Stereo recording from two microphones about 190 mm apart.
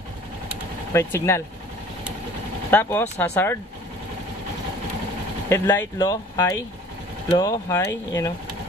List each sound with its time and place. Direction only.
0.9 s speech: 15° left (ahead or behind)
2.7 s speech: 10° left (ahead or behind)
5.5 s speech: 15° left (ahead or behind)